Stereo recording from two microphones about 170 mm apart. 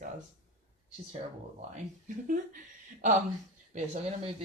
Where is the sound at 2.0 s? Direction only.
50° right (ahead or behind).